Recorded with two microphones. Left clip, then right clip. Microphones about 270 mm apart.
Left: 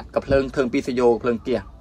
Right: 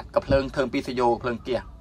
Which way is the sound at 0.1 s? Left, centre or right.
Centre.